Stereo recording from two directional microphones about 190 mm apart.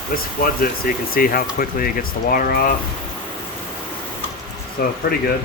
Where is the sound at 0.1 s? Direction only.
50° left (ahead or behind).